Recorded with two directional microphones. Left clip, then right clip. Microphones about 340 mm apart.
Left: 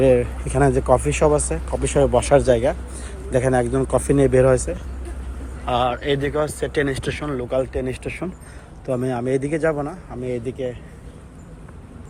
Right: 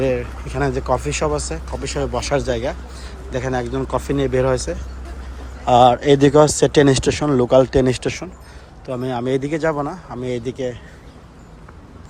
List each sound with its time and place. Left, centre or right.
0.0 s speech: centre
5.6 s speech: centre
8.9 s speech: centre